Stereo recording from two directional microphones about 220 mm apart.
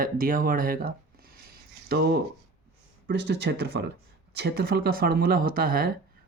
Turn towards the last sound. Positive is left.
turn(degrees=-40)  # may be behind; listen again after turning